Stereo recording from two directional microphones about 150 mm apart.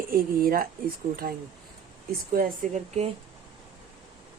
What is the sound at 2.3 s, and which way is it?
Speech, 70° right (ahead or behind).